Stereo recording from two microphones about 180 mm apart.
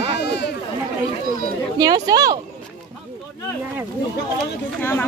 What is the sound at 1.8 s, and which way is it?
Speech, 20° right (ahead or behind).